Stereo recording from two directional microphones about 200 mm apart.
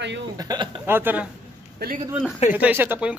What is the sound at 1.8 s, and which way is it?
Speech, 55° right (ahead or behind).